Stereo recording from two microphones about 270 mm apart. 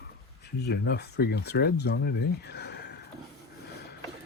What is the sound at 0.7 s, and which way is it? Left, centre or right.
Speech, left.